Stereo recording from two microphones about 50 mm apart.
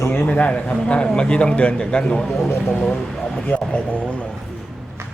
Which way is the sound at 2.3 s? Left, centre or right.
Left.